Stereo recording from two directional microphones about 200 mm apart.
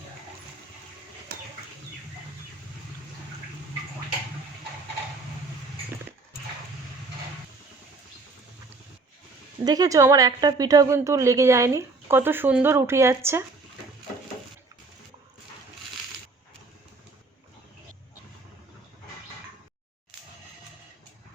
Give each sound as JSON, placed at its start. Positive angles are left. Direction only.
{"t": 1.3, "sound": "bird flight", "side_deg": -50}
{"t": 9.6, "sound": "a woman's voice", "side_deg": -20}